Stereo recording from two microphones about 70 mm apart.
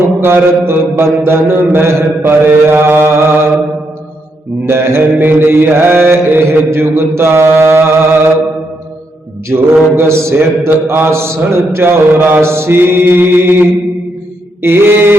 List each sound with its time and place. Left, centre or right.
0.2 s a man's voice: right
4.6 s a man's voice: right
9.5 s mantra: right
9.9 s a man's voice: right